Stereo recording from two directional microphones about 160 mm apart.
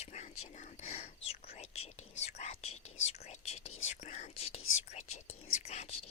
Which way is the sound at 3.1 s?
40° left (ahead or behind).